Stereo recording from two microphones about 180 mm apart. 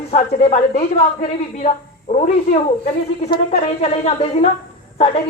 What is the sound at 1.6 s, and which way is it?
A woman's voice, 40° left (ahead or behind).